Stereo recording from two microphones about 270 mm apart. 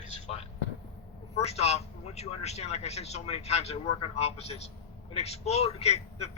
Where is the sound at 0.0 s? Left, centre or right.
Left.